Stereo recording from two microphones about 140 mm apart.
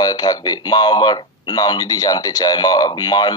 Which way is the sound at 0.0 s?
30° left (ahead or behind).